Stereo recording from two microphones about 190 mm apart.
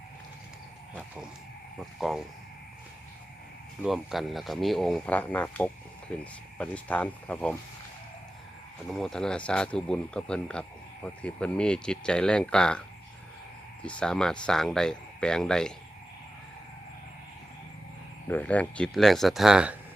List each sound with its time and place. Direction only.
0.9 s a sound: 5° right (ahead or behind)
1.8 s speech: centre (ahead or behind)
3.8 s speech: centre (ahead or behind)
8.9 s speech: centre (ahead or behind)
13.8 s speech: 5° left (ahead or behind)
18.3 s speech: 10° left (ahead or behind)